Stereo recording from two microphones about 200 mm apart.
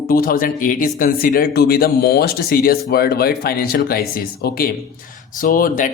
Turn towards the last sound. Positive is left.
turn(degrees=45)  # may be behind; listen again after turning